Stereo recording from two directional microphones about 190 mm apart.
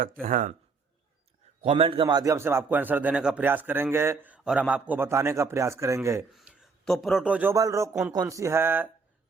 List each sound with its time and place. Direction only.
0.0 s speech: 45° right (ahead or behind)
1.6 s a man's voice: 30° right (ahead or behind); by 7.5 s 5° right (ahead or behind)
7.5 s a man's voice: 15° right (ahead or behind)